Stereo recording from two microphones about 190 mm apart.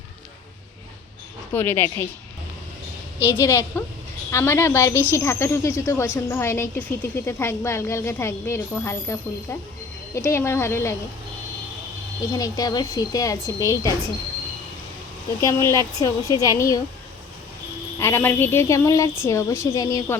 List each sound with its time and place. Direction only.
1.5 s speech: 10° left (ahead or behind)
3.2 s speech: 15° left (ahead or behind)
12.3 s a woman's voice: 20° left (ahead or behind)
15.4 s speech: 15° left (ahead or behind)
18.0 s speech: 10° left (ahead or behind)